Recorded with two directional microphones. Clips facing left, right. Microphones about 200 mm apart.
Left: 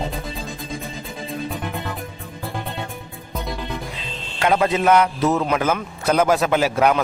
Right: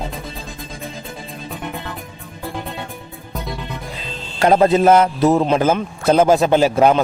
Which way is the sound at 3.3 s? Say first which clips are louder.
Even; centre (ahead or behind).